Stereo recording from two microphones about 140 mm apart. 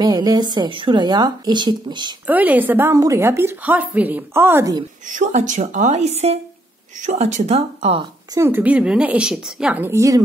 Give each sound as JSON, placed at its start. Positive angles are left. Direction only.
{"t": 0.0, "sound": "speech", "side_deg": -30}
{"t": 2.2, "sound": "a woman's voice", "side_deg": -10}
{"t": 5.0, "sound": "a woman's voice", "side_deg": -60}
{"t": 8.4, "sound": "a woman's voice", "side_deg": -15}
{"t": 9.8, "sound": "a woman's voice", "side_deg": -20}